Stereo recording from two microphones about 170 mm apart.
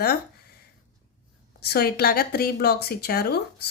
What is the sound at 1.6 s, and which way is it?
Speech, 65° left (ahead or behind).